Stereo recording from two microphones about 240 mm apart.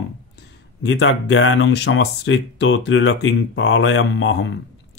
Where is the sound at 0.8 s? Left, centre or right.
Left.